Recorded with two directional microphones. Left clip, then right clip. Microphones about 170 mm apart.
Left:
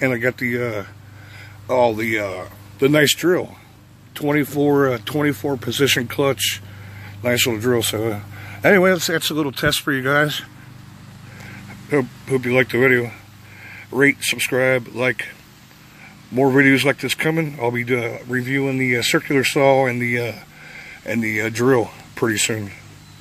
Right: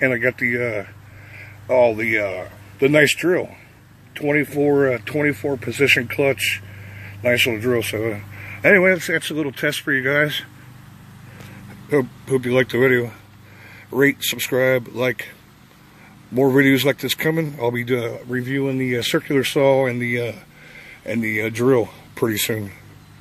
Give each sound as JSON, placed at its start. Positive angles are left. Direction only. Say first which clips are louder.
{"t": 0.0, "sound": "speech", "louder": "right 1 dB", "side_deg": 15}
{"t": 0.6, "sound": "speech", "louder": "right 1 dB", "side_deg": 5}
{"t": 2.0, "sound": "speech", "louder": "right 2 dB", "side_deg": 20}
{"t": 11.9, "sound": "speech", "louder": "right 1 dB", "side_deg": -5}
{"t": 16.3, "sound": "speech", "louder": "left 1 dB", "side_deg": -5}